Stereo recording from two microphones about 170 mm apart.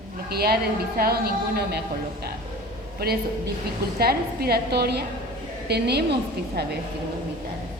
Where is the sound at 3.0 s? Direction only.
65° right (ahead or behind).